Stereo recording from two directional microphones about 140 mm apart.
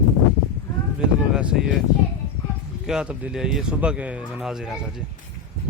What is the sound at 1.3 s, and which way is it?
Speech, 5° right (ahead or behind).